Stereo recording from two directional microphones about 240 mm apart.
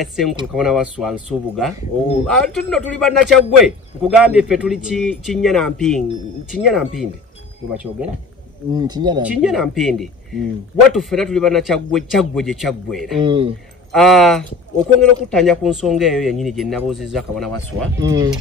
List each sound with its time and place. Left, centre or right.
0.0 s speech: centre
8.7 s speech: centre
9.3 s speech: centre
13.2 s speech: right
13.9 s speech: centre
18.0 s speech: centre